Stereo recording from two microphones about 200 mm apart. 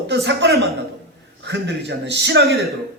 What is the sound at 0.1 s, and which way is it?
A man's voice, 60° right (ahead or behind).